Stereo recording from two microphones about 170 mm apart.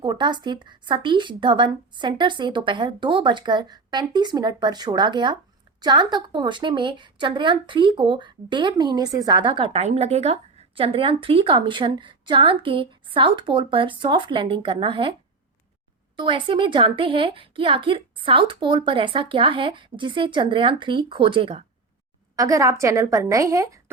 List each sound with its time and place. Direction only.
0.0 s speech: 25° right (ahead or behind)
16.1 s speech: 30° right (ahead or behind)
22.4 s speech: 20° right (ahead or behind)